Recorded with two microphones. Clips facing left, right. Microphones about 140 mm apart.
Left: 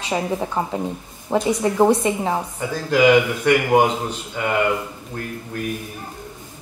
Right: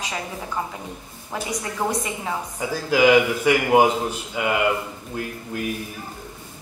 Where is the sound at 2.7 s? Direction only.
5° right (ahead or behind).